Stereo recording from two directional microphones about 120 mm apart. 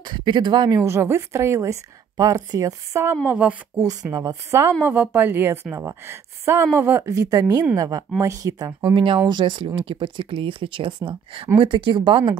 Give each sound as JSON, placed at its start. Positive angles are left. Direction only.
{"t": 0.0, "sound": "speech", "side_deg": -40}
{"t": 0.8, "sound": "speech", "side_deg": -20}
{"t": 3.8, "sound": "speech", "side_deg": -30}
{"t": 8.9, "sound": "speech", "side_deg": -45}